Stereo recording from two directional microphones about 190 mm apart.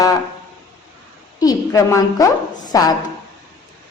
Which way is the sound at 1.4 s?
20° left (ahead or behind).